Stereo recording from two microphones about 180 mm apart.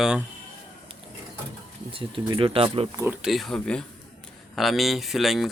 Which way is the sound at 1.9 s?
30° right (ahead or behind).